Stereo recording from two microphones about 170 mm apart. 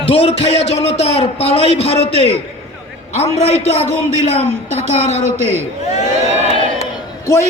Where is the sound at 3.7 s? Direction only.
40° left (ahead or behind).